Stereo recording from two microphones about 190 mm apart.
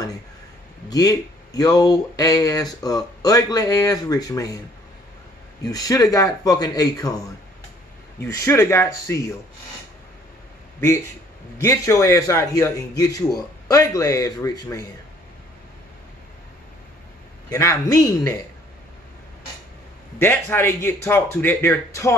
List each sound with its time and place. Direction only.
0.8 s speech: 20° left (ahead or behind)
5.6 s speech: 20° left (ahead or behind)
8.2 s a man's voice: 15° left (ahead or behind)
11.6 s a man's voice: 15° left (ahead or behind)
17.5 s a man's voice: 15° left (ahead or behind)
20.2 s a man's voice: 15° left (ahead or behind)